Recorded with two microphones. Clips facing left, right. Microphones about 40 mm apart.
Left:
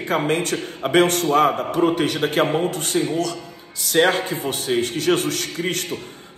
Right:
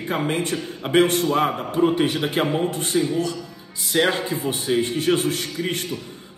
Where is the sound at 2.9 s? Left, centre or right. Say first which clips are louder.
Even; left.